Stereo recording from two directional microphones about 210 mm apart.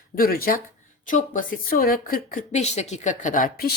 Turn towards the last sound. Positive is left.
turn(degrees=45)  # may be behind; listen again after turning